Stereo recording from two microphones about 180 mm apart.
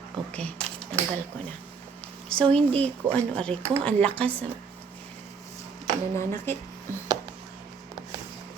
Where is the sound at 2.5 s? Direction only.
5° left (ahead or behind).